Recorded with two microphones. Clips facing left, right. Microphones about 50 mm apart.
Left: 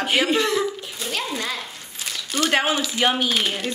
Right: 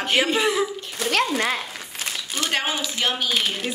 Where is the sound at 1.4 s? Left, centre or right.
Right.